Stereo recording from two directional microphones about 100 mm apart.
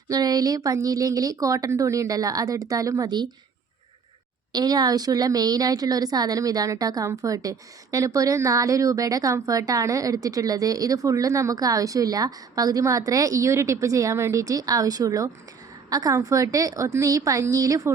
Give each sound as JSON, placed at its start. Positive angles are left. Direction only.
{"t": 0.1, "sound": "speech", "side_deg": -40}
{"t": 4.5, "sound": "speech", "side_deg": -40}